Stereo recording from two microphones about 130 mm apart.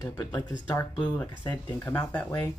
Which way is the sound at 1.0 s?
10° left (ahead or behind).